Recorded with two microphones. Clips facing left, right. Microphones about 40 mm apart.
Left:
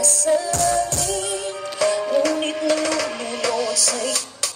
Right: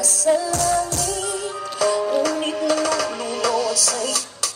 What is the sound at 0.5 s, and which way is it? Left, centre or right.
Music, left.